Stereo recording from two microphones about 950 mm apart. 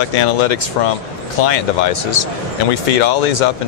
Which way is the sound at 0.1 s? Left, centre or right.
Left.